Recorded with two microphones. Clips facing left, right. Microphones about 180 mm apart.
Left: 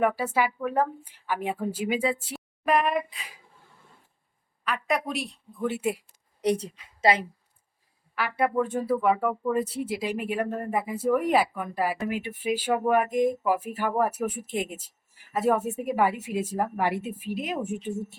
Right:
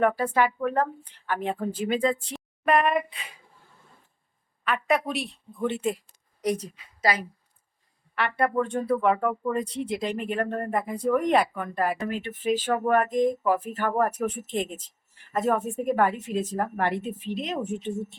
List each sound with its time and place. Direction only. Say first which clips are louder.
0.0 s speech: right 2 dB; 5° left (ahead or behind)
4.6 s a woman's voice: right 3 dB; centre (ahead or behind)
6.4 s a woman's voice: left 2 dB; 30° left (ahead or behind)
8.3 s speech: even; 10° left (ahead or behind)